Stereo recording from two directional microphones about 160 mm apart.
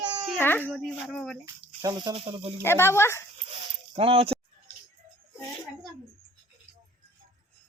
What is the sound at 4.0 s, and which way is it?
Speech, 35° right (ahead or behind).